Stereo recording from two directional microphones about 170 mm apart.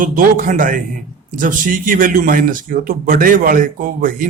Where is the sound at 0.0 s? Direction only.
50° right (ahead or behind).